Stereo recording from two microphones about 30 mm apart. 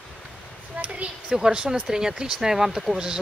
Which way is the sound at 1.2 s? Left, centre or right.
Centre.